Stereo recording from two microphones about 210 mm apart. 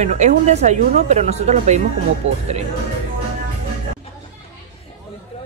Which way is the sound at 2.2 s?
65° right (ahead or behind).